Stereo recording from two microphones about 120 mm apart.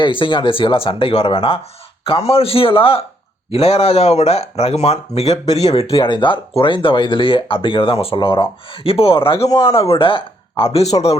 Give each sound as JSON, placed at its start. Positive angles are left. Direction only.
{"t": 0.0, "sound": "speech", "side_deg": 45}
{"t": 5.5, "sound": "speech", "side_deg": 30}
{"t": 5.7, "sound": "speech", "side_deg": 50}